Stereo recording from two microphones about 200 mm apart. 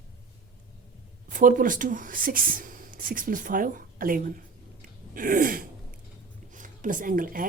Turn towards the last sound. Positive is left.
turn(degrees=-45)  # may be behind; listen again after turning